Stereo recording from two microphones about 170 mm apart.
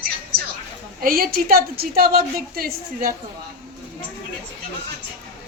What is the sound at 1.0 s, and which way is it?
A woman's voice, 60° right (ahead or behind).